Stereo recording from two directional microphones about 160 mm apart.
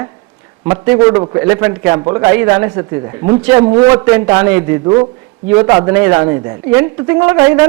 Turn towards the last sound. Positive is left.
turn(degrees=-15)  # may be behind; listen again after turning